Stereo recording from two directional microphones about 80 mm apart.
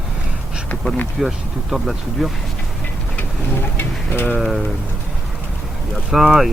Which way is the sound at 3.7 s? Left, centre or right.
Left.